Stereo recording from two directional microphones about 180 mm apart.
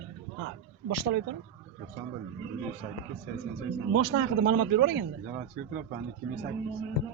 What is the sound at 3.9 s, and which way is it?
Speech, 65° right (ahead or behind).